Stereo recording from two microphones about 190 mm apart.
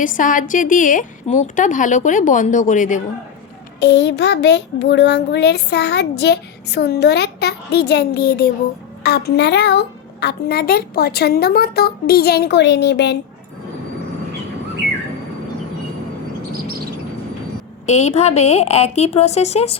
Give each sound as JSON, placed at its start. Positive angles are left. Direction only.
{"t": 0.0, "sound": "a woman's voice", "side_deg": 45}
{"t": 3.8, "sound": "a child's voice", "side_deg": 65}
{"t": 17.8, "sound": "a woman's voice", "side_deg": 35}